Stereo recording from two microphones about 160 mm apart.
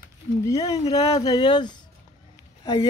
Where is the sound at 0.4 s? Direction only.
20° left (ahead or behind).